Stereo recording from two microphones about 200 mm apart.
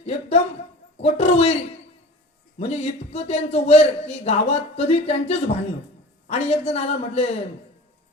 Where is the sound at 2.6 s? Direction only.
30° left (ahead or behind).